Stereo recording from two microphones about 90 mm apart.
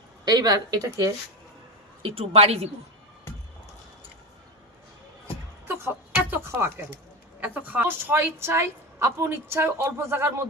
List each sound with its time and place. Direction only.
0.3 s speech: 45° right (ahead or behind)
2.0 s a woman's voice: 90° right
6.1 s a woman's voice: 25° right (ahead or behind)